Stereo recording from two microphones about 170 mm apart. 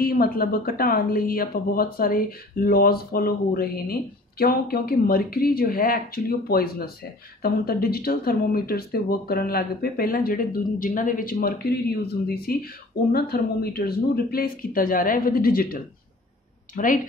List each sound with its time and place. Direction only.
0.0 s speech: 60° left (ahead or behind)